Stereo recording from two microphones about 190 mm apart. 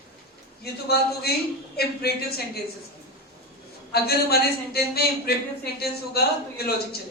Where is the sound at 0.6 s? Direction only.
55° left (ahead or behind).